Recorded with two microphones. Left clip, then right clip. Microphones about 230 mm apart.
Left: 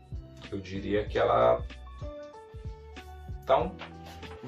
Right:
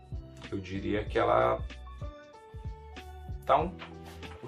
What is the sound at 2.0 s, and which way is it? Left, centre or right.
Music, centre.